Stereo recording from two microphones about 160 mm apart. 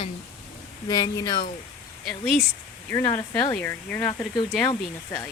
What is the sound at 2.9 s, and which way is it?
Speech, 20° left (ahead or behind).